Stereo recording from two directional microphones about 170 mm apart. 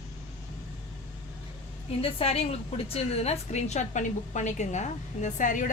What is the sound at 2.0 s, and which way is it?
A woman's voice, 35° left (ahead or behind).